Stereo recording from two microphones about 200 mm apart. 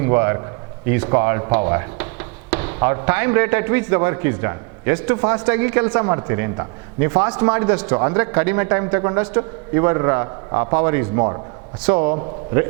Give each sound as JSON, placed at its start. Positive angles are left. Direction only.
{"t": 0.0, "sound": "a man's voice", "side_deg": -20}